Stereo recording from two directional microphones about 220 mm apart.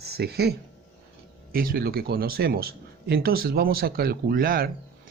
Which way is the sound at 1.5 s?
40° right (ahead or behind).